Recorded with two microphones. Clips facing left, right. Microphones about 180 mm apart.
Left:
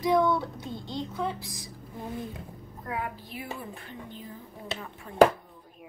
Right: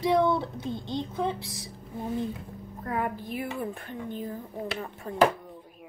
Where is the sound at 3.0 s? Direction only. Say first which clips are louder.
Right 8 dB; 50° right (ahead or behind).